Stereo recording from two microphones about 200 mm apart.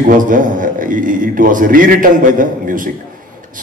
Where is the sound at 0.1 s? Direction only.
40° right (ahead or behind).